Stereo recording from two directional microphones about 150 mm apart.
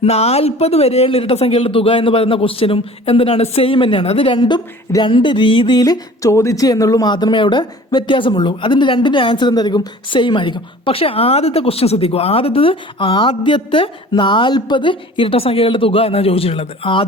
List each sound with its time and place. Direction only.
0.0 s a man's voice: 45° left (ahead or behind)